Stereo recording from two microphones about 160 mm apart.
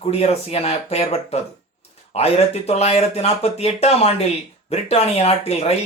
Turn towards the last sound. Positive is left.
turn(degrees=40)  # may be behind; listen again after turning